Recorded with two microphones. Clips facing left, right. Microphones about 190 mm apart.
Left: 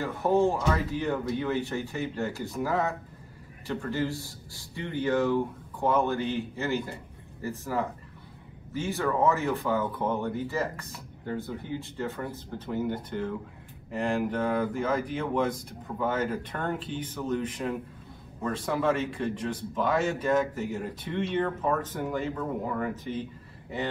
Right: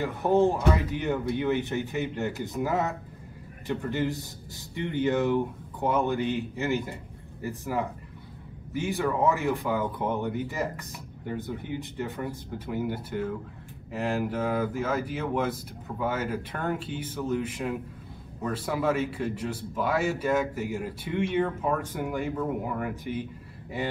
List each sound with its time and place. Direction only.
0.0 s speech: 20° right (ahead or behind)